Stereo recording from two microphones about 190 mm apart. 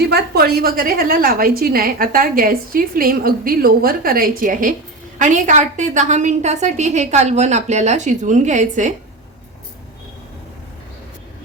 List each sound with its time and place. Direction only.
0.1 s a woman's voice: 55° right (ahead or behind)